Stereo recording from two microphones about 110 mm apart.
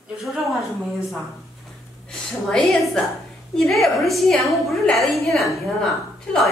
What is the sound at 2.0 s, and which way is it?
A woman's voice, 5° left (ahead or behind).